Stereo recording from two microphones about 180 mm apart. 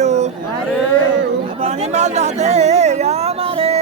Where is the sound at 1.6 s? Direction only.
40° right (ahead or behind).